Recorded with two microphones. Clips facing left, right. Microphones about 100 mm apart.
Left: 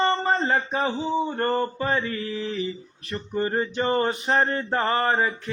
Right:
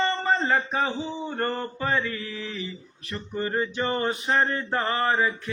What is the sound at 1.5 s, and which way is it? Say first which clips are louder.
Mantra: left 3 dB; 30° left (ahead or behind).